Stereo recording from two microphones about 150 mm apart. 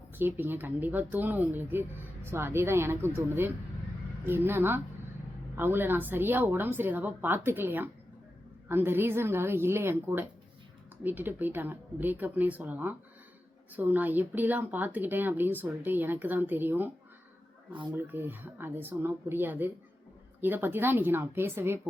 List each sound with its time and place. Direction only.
0.2 s speech: 15° right (ahead or behind)
17.9 s speech: 15° right (ahead or behind)